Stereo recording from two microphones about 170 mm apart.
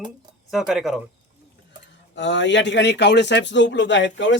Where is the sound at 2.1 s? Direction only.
90° left.